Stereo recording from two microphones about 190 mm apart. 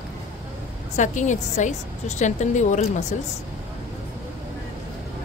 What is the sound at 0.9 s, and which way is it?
A woman's voice, 40° left (ahead or behind).